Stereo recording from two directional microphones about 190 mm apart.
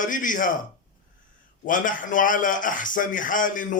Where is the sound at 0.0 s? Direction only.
45° left (ahead or behind).